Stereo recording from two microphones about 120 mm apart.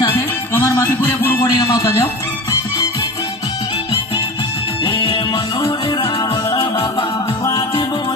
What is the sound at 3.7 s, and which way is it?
Music, 45° left (ahead or behind).